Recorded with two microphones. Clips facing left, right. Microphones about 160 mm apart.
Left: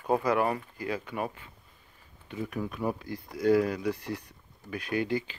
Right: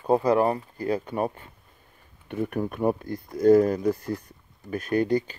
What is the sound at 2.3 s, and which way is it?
Speech, 55° right (ahead or behind).